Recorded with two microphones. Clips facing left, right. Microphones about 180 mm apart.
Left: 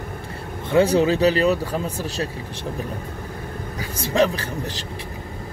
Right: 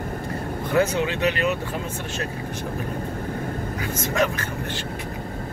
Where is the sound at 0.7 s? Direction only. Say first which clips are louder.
Left 5 dB; 30° left (ahead or behind).